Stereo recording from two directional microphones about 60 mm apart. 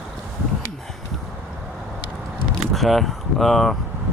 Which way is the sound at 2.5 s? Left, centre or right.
Centre.